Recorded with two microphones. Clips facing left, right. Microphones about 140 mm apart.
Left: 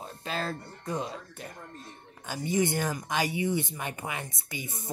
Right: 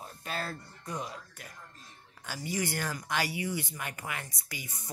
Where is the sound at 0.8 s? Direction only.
25° left (ahead or behind).